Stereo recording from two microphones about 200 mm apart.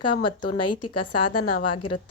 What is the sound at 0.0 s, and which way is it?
Speech, 25° left (ahead or behind).